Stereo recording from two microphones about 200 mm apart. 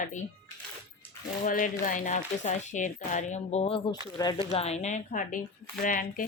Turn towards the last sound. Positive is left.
turn(degrees=40)  # may be behind; listen again after turning